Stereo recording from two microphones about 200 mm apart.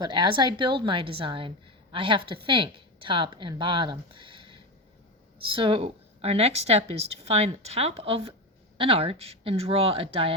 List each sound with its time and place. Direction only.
0.0 s a woman's voice: 20° right (ahead or behind)